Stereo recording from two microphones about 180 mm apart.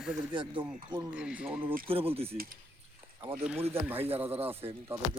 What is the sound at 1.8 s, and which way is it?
Speech, 30° right (ahead or behind).